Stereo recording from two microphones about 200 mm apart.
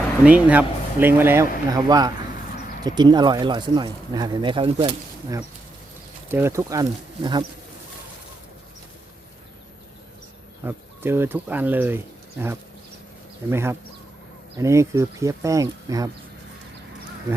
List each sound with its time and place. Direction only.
0.3 s speech: 5° right (ahead or behind); by 5.4 s 25° right (ahead or behind)
6.3 s speech: 15° right (ahead or behind)
10.6 s speech: 10° right (ahead or behind)